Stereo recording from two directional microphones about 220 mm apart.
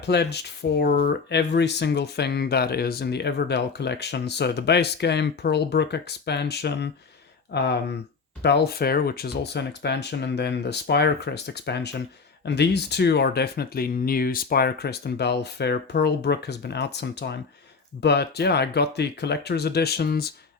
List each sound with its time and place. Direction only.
0.0 s speech: 50° left (ahead or behind)